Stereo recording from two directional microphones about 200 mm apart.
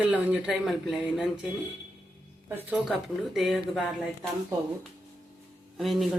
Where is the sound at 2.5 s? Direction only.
5° right (ahead or behind).